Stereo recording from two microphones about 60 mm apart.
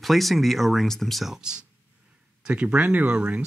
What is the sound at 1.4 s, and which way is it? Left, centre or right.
Speech, centre.